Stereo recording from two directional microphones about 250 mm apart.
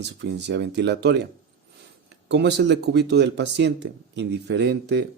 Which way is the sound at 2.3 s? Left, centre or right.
Right.